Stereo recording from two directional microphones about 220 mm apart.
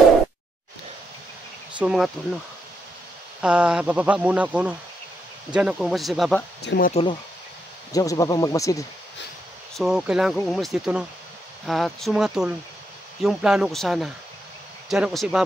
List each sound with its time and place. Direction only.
1.8 s speech: 5° right (ahead or behind)
3.3 s speech: 5° right (ahead or behind)
6.6 s speech: 50° left (ahead or behind)
6.9 s speech: 25° left (ahead or behind)
9.8 s speech: 5° right (ahead or behind)